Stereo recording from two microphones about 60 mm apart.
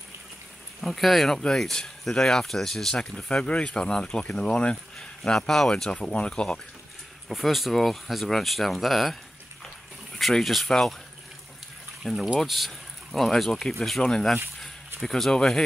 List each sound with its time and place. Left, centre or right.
0.7 s speech: centre
7.2 s speech: centre
12.0 s speech: centre